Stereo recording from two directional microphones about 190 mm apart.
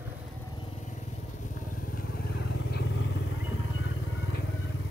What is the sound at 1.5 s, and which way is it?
Vehicle, 45° left (ahead or behind).